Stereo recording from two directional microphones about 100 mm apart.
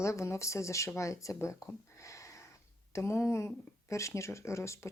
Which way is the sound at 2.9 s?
30° left (ahead or behind).